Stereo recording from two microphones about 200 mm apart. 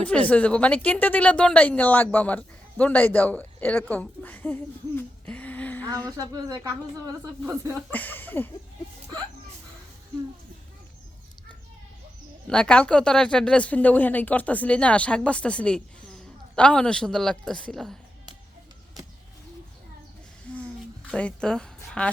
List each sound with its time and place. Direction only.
0.0 s speech: 5° left (ahead or behind)
6.1 s speech: 20° right (ahead or behind)
7.8 s speech: 10° left (ahead or behind)
12.5 s speech: 5° left (ahead or behind)
19.0 s bird: 20° right (ahead or behind)
21.1 s a woman's voice: 5° left (ahead or behind)